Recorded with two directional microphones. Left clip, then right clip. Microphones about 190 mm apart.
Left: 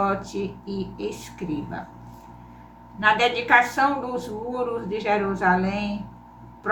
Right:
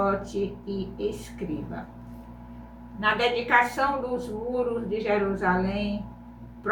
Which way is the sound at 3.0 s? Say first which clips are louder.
Left 4 dB; 20° left (ahead or behind).